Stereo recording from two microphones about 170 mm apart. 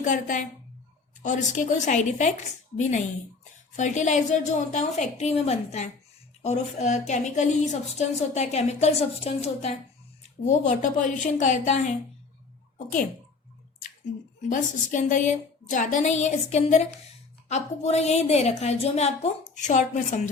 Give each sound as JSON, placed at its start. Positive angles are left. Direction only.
{"t": 0.0, "sound": "a woman's voice", "side_deg": 50}
{"t": 3.8, "sound": "a woman's voice", "side_deg": 45}
{"t": 14.5, "sound": "a woman's voice", "side_deg": 50}